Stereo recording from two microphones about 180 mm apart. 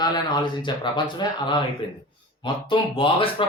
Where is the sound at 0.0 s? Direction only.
25° left (ahead or behind).